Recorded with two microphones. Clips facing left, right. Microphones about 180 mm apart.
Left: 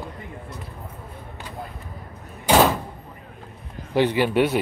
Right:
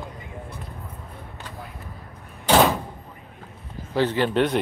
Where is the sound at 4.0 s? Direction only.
10° left (ahead or behind).